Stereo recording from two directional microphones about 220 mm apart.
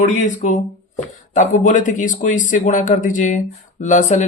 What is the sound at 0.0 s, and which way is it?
Speech, 35° left (ahead or behind).